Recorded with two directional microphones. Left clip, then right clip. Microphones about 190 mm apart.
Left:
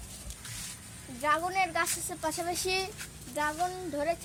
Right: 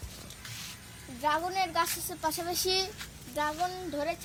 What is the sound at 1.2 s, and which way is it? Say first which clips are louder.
Speech: left 1 dB; 15° left (ahead or behind).